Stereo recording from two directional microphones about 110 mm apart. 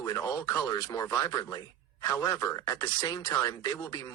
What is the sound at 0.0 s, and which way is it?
Speech, 35° left (ahead or behind).